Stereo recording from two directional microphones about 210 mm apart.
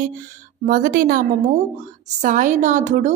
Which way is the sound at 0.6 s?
40° right (ahead or behind).